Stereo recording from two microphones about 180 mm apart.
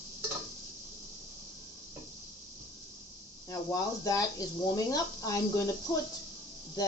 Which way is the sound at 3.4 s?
20° left (ahead or behind).